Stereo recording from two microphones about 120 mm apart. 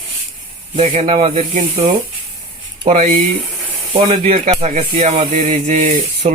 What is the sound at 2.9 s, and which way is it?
Speech, 75° right (ahead or behind).